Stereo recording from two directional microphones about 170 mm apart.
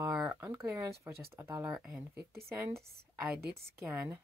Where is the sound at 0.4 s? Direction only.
15° right (ahead or behind).